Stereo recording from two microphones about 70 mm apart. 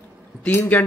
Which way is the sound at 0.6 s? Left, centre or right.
Left.